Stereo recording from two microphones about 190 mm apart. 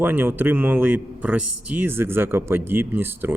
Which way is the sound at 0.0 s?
10° right (ahead or behind).